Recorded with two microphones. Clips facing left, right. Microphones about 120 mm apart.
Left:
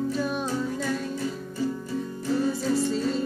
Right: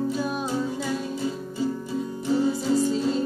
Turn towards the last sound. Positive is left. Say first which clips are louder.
# right 2 dB
turn(degrees=-5)  # may be behind; listen again after turning